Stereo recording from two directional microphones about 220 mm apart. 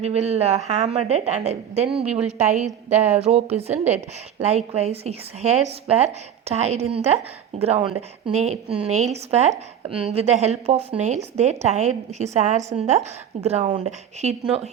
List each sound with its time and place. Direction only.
0.0 s speech: 30° right (ahead or behind)
2.0 s a woman's voice: 5° right (ahead or behind)
2.4 s a woman's voice: 30° right (ahead or behind)
3.5 s a woman's voice: 10° right (ahead or behind)
4.4 s a woman's voice: 30° right (ahead or behind)